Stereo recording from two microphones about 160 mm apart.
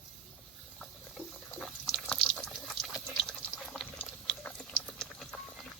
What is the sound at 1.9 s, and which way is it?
Water, centre (ahead or behind).